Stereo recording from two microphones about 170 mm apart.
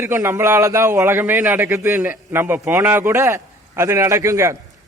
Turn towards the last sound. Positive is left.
turn(degrees=-15)  # may be behind; listen again after turning